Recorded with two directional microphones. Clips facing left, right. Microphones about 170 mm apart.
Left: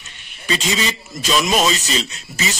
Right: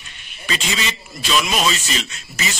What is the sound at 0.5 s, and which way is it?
Speech, 35° left (ahead or behind).